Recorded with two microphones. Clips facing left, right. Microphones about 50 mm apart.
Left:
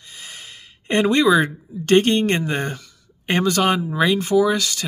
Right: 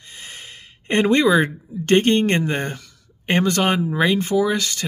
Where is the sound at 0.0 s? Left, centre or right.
Right.